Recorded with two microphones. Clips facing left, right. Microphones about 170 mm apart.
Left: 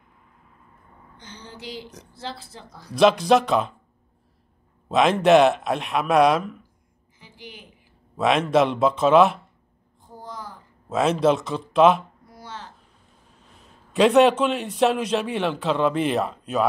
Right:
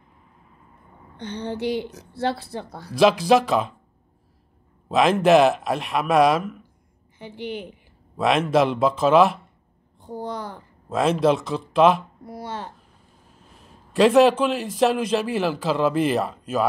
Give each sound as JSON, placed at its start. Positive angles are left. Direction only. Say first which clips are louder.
{"t": 1.1, "sound": "speech", "louder": "right 14 dB", "side_deg": -65}
{"t": 2.9, "sound": "a man's voice", "louder": "even", "side_deg": 0}
{"t": 4.8, "sound": "a man's voice", "louder": "even", "side_deg": 0}
{"t": 7.2, "sound": "a woman's voice", "louder": "right 13 dB", "side_deg": -65}
{"t": 8.2, "sound": "a man's voice", "louder": "even", "side_deg": 0}
{"t": 10.0, "sound": "a sound", "louder": "right 8 dB", "side_deg": -65}
{"t": 10.9, "sound": "a man's voice", "louder": "even", "side_deg": 0}
{"t": 12.3, "sound": "a sound", "louder": "right 9 dB", "side_deg": -60}
{"t": 13.6, "sound": "a man's voice", "louder": "right 1 dB", "side_deg": 0}